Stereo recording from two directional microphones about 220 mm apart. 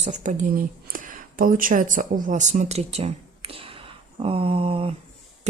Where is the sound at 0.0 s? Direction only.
35° right (ahead or behind).